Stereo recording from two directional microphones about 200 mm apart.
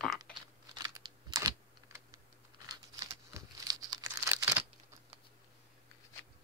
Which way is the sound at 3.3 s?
20° right (ahead or behind).